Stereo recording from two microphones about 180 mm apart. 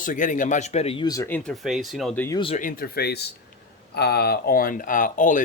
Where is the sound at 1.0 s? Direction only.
20° left (ahead or behind).